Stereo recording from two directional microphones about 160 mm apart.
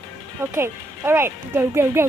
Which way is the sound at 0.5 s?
15° right (ahead or behind).